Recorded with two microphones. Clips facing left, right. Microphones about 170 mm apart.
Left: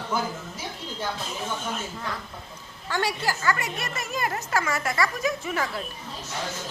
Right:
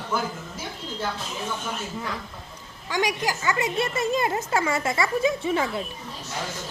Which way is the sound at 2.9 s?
15° right (ahead or behind).